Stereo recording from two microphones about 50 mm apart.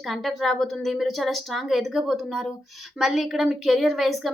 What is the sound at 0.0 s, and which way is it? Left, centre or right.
A woman's voice, centre.